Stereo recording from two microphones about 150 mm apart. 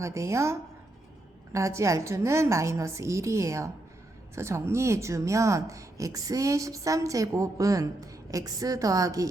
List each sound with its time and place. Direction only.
0.0 s speech: 20° right (ahead or behind)
1.5 s speech: 20° right (ahead or behind)